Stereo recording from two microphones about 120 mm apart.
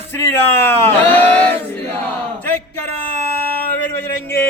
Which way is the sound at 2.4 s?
15° left (ahead or behind).